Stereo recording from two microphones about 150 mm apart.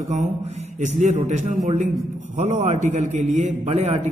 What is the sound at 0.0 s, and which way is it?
A man's voice, 50° right (ahead or behind).